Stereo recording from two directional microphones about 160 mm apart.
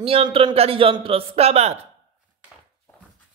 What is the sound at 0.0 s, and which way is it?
Speech, 35° right (ahead or behind).